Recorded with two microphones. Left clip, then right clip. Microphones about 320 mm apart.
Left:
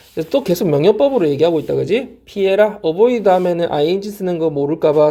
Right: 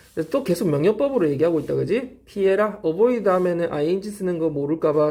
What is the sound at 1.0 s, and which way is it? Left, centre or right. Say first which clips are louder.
Speech: left 7 dB; centre.